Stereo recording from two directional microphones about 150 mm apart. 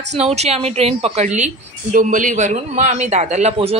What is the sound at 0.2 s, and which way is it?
A woman's voice, 45° right (ahead or behind).